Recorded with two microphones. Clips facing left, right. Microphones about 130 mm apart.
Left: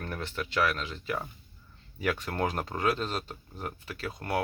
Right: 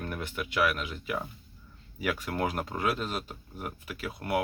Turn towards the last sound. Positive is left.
turn(degrees=-10)  # may be behind; listen again after turning